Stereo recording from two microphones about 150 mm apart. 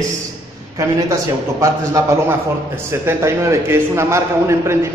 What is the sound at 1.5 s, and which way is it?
A man's voice, 20° right (ahead or behind).